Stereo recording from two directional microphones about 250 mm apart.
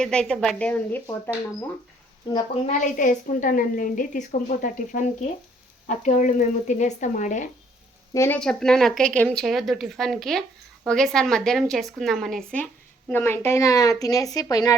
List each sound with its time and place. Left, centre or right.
0.0 s speech: centre
2.6 s a woman's voice: left
8.1 s a woman's voice: centre